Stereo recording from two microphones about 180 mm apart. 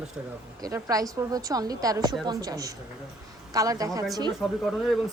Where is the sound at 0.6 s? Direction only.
20° right (ahead or behind).